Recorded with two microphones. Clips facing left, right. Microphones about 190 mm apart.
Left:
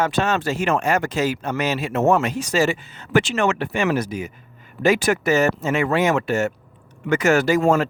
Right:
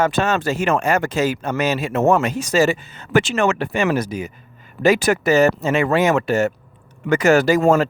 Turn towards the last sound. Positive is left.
turn(degrees=-40)  # may be behind; listen again after turning